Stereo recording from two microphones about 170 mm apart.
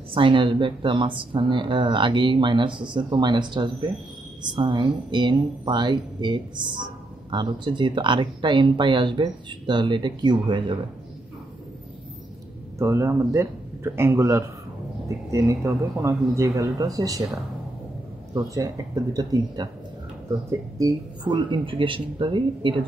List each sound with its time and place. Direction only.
0.1 s a woman's voice: 30° right (ahead or behind)
12.7 s a woman's voice: 15° right (ahead or behind)